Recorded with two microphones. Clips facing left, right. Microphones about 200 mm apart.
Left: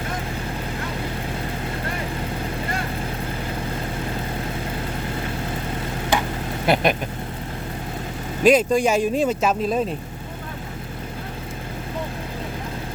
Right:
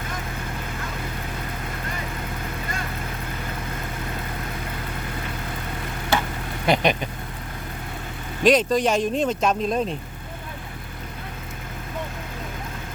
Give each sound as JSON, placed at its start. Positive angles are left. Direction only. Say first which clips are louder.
{"t": 6.1, "sound": "vehicle", "louder": "left 1 dB", "side_deg": 15}
{"t": 6.7, "sound": "speech", "louder": "left 1 dB", "side_deg": 5}
{"t": 8.4, "sound": "speech", "louder": "left 2 dB", "side_deg": 10}